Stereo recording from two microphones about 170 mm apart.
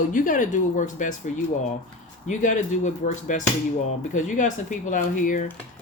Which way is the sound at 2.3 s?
45° left (ahead or behind).